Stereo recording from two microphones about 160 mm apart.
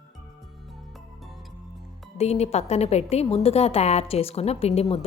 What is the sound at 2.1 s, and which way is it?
A woman's voice, 45° left (ahead or behind).